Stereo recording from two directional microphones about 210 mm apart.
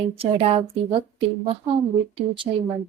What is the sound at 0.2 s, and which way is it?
Speech, 30° right (ahead or behind).